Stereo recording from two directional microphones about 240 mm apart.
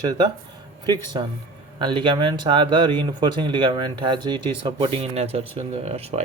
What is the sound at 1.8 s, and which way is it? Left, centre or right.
Speech, centre.